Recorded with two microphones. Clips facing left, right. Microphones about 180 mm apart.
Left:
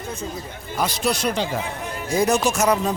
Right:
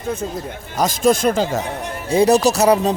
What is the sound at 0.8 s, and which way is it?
Speech, 45° right (ahead or behind).